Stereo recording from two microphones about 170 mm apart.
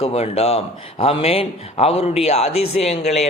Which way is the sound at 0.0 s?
35° left (ahead or behind).